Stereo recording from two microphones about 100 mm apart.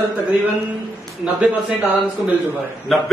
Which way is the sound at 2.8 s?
Centre (ahead or behind).